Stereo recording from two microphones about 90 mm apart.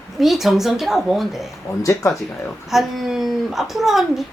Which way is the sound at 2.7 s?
Centre (ahead or behind).